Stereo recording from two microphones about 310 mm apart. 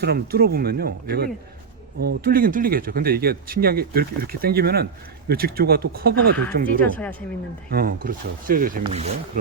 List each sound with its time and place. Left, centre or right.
0.0 s speech: right
6.8 s speech: centre
7.7 s speech: right